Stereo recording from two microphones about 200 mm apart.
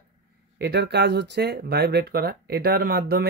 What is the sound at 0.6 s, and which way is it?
Speech, 55° right (ahead or behind).